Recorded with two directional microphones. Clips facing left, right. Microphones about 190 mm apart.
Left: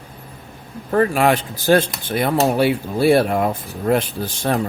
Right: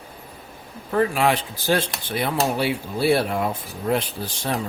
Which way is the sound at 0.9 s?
50° left (ahead or behind).